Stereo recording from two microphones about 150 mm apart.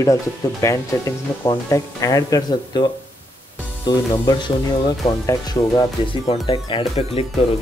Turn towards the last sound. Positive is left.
turn(degrees=40)  # may be behind; listen again after turning